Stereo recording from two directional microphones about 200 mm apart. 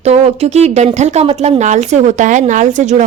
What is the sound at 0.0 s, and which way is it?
A woman's voice, 30° right (ahead or behind).